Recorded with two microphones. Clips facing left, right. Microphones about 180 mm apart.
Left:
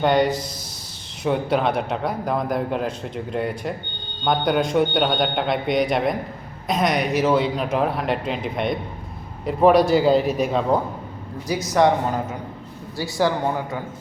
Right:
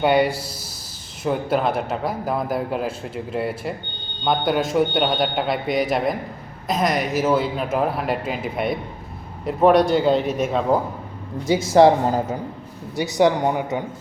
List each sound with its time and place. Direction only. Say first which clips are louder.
0.0 s a man's voice: even; 10° right (ahead or behind)
11.4 s speech: right 5 dB; 25° right (ahead or behind)
13.0 s speech: right 4 dB; 20° right (ahead or behind)